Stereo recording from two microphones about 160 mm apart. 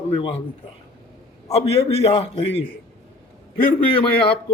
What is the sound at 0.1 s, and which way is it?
Speech, 35° left (ahead or behind).